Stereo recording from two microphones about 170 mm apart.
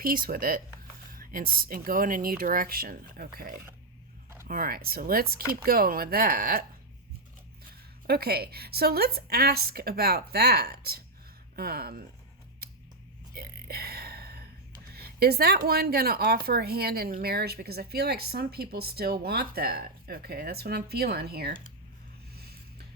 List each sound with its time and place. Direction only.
0.0 s a woman's voice: 60° right (ahead or behind)
7.7 s a woman's voice: 65° right (ahead or behind)
12.6 s music: 65° right (ahead or behind)
13.3 s whispering: 65° right (ahead or behind)
14.9 s a woman's voice: 65° right (ahead or behind)
22.4 s a sound: 65° right (ahead or behind)